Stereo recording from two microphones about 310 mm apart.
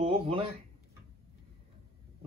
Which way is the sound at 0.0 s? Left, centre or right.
Centre.